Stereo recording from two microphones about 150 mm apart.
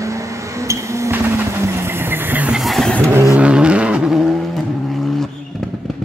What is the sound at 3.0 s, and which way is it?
Vehicle, 15° right (ahead or behind).